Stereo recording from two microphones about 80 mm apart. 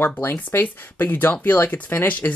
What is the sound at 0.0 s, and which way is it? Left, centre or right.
Speech, left.